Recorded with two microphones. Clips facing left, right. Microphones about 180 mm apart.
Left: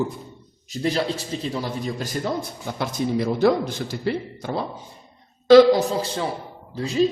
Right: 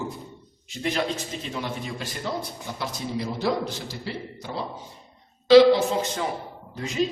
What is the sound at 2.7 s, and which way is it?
A man's voice, 55° left (ahead or behind).